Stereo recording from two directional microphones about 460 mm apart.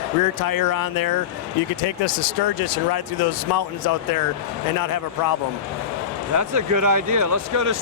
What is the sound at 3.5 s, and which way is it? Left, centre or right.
Speech, left.